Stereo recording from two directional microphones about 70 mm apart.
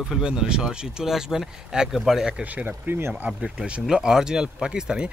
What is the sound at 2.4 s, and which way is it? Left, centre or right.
Speech, right.